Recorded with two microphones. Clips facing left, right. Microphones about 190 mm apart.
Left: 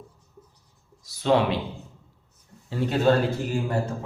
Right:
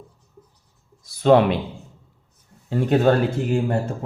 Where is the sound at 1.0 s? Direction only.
55° right (ahead or behind).